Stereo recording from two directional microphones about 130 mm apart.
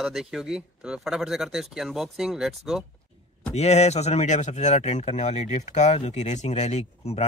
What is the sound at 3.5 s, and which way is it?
Speech, 55° left (ahead or behind).